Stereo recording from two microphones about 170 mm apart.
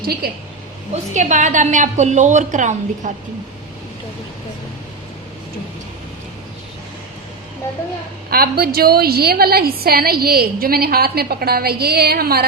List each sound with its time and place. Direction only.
0.2 s a woman's voice: 65° right (ahead or behind)
1.1 s a woman's voice: 45° right (ahead or behind)
8.3 s a woman's voice: 65° right (ahead or behind)